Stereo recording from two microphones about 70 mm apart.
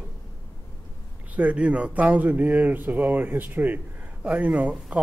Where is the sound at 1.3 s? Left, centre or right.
Centre.